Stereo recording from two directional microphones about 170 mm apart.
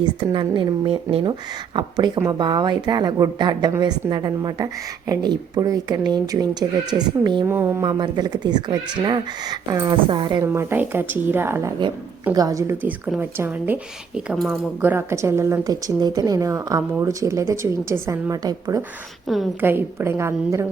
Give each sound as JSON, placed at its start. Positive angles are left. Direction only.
{"t": 0.0, "sound": "a woman's voice", "side_deg": -30}
{"t": 7.4, "sound": "a woman's voice", "side_deg": -15}
{"t": 10.4, "sound": "a woman's voice", "side_deg": -15}
{"t": 14.3, "sound": "speech", "side_deg": 0}
{"t": 14.8, "sound": "a woman's voice", "side_deg": -15}
{"t": 19.3, "sound": "speech", "side_deg": 0}
{"t": 19.6, "sound": "a woman's voice", "side_deg": -15}